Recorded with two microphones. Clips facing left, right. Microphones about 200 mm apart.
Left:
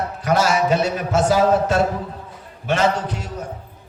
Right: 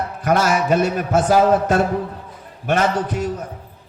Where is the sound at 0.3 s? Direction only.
50° right (ahead or behind).